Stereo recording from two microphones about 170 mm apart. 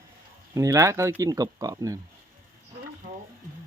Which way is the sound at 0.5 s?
20° right (ahead or behind).